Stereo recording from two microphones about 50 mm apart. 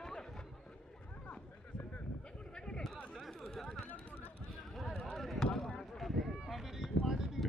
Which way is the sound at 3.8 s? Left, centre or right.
Left.